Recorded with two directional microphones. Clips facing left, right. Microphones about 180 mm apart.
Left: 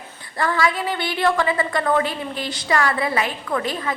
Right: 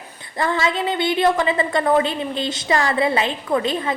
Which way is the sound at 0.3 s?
25° right (ahead or behind).